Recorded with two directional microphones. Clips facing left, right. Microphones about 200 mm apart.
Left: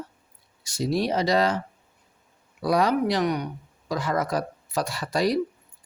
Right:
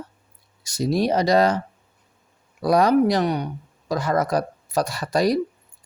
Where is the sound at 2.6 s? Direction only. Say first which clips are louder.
Right 5 dB; 45° right (ahead or behind).